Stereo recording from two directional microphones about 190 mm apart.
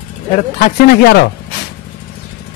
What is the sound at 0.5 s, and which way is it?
Speech, 55° left (ahead or behind).